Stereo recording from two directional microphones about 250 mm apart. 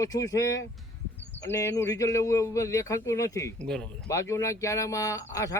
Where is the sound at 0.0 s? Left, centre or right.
Centre.